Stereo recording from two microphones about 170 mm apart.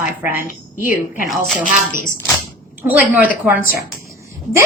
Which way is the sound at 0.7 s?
55° left (ahead or behind).